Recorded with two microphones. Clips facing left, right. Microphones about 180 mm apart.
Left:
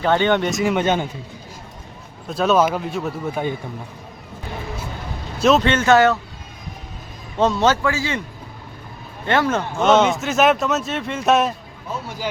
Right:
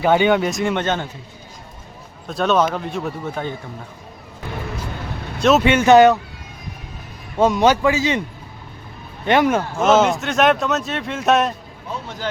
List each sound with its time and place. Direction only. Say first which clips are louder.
0.0 s speech: right 2 dB; 10° right (ahead or behind); by 1.0 s 10° left (ahead or behind)
2.2 s speech: left 1 dB; centre (ahead or behind)
5.4 s speech: even; centre (ahead or behind)
5.6 s a man's voice: right 4 dB; 15° right (ahead or behind)
7.3 s a man's voice: right 2 dB; 10° right (ahead or behind)
9.2 s a man's voice: right 3 dB; 15° right (ahead or behind)
9.7 s speech: left 1 dB; centre (ahead or behind)